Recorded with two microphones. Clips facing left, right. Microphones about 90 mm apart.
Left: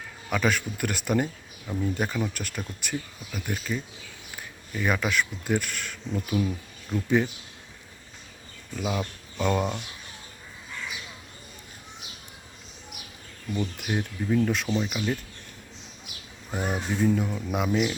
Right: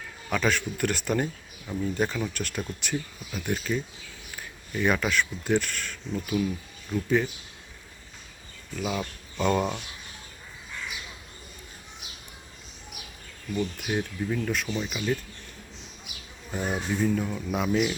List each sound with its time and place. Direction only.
0.3 s speech: 10° left (ahead or behind)
8.8 s speech: 10° left (ahead or behind)
13.6 s speech: 5° left (ahead or behind)
14.4 s speech: 25° left (ahead or behind)
14.8 s speech: 10° left (ahead or behind)
16.5 s speech: 10° left (ahead or behind)